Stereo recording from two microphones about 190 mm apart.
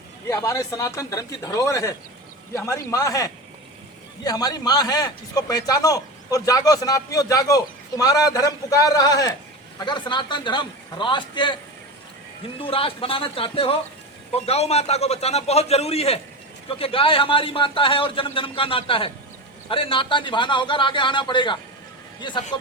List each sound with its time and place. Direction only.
0.3 s a man's voice: 15° left (ahead or behind)
12.6 s a man's voice: 30° left (ahead or behind)